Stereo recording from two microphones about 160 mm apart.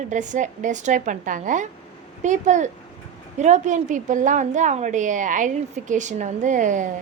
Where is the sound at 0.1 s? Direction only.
50° right (ahead or behind).